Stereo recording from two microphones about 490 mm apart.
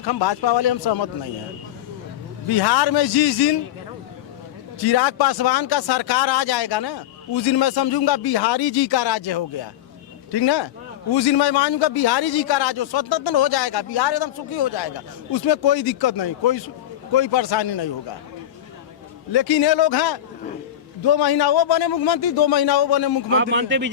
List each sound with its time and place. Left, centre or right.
0.0 s a man's voice: left
2.5 s a man's voice: left
4.8 s a man's voice: left
19.3 s a man's voice: left
23.3 s a man's voice: right